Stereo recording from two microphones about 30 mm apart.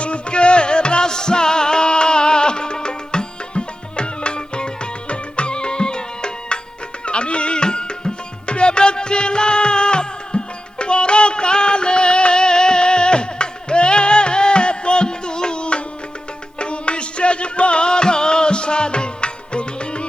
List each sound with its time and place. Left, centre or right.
0.0 s music: left